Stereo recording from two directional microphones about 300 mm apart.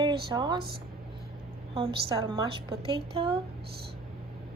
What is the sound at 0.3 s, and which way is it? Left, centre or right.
Speech, centre.